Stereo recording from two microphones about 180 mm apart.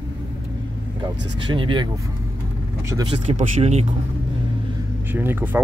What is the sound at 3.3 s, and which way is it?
Speech, 35° right (ahead or behind).